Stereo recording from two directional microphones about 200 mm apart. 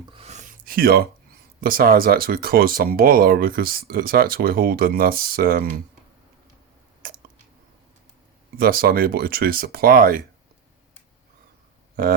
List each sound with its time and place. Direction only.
0.1 s speech: 30° right (ahead or behind); by 5.6 s 45° right (ahead or behind)
7.0 s a sound: 45° right (ahead or behind)
8.5 s speech: 45° right (ahead or behind)